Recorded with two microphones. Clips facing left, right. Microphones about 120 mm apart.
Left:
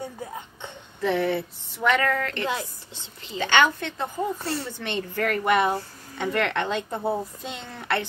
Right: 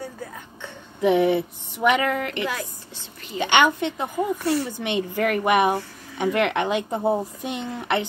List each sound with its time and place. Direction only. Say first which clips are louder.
1.0 s speech: right 5 dB; 15° right (ahead or behind)